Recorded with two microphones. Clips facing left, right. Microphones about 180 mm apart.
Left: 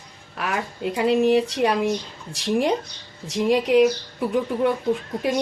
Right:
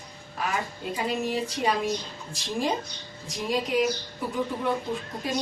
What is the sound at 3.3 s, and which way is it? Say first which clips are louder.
Speech: left 9 dB; 75° left (ahead or behind).